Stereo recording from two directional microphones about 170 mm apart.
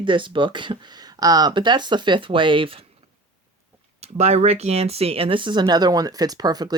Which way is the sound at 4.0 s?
40° right (ahead or behind).